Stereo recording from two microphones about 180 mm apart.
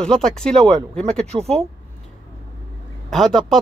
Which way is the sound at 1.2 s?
35° right (ahead or behind).